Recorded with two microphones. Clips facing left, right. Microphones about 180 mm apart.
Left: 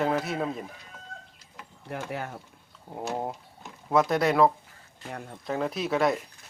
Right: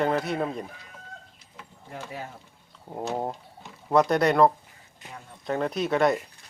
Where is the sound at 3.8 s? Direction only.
Centre (ahead or behind).